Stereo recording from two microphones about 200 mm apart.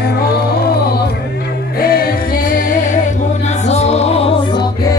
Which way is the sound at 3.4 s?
35° left (ahead or behind).